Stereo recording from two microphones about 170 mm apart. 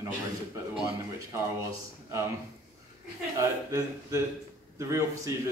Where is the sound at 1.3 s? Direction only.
15° right (ahead or behind).